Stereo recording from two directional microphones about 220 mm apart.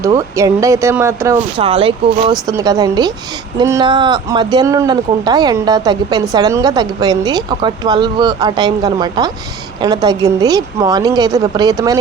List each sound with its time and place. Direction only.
0.0 s speech: 15° right (ahead or behind)
1.5 s speech: 25° right (ahead or behind)